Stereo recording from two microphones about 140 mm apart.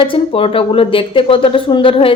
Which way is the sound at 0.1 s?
40° left (ahead or behind).